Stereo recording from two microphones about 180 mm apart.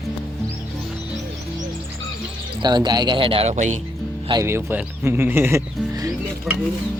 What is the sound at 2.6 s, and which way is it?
Speech, 25° right (ahead or behind).